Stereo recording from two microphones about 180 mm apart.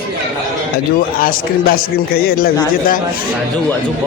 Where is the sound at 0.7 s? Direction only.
50° left (ahead or behind).